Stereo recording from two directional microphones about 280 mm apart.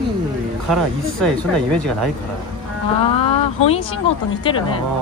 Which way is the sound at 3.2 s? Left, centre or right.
Left.